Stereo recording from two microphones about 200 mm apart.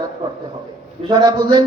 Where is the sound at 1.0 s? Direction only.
20° right (ahead or behind).